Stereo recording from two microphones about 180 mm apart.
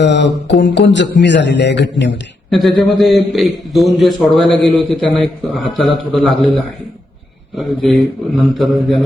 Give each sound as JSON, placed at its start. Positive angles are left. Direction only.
{"t": 0.0, "sound": "a man's voice", "side_deg": 75}
{"t": 2.5, "sound": "a man's voice", "side_deg": 0}
{"t": 7.5, "sound": "a man's voice", "side_deg": 0}